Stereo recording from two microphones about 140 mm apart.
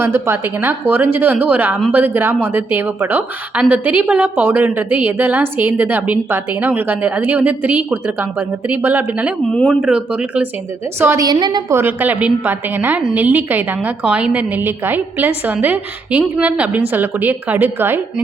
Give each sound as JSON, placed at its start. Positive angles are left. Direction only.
{"t": 0.0, "sound": "a woman's voice", "side_deg": -15}
{"t": 9.5, "sound": "speech", "side_deg": 5}
{"t": 9.8, "sound": "a woman's voice", "side_deg": -10}
{"t": 11.0, "sound": "a woman's voice", "side_deg": -20}
{"t": 11.7, "sound": "a woman's voice", "side_deg": -15}